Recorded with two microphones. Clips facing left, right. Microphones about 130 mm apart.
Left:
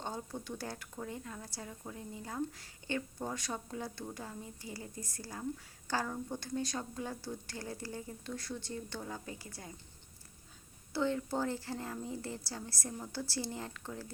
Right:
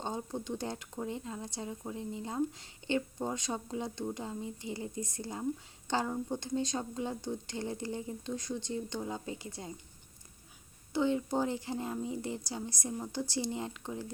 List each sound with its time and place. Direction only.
0.0 s speech: 20° right (ahead or behind)
10.9 s a woman's voice: 15° right (ahead or behind)